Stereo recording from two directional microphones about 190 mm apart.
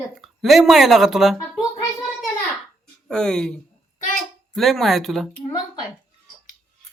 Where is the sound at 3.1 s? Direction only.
5° left (ahead or behind).